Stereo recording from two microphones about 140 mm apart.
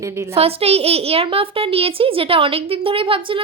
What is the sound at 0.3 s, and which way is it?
A woman's voice, 45° right (ahead or behind).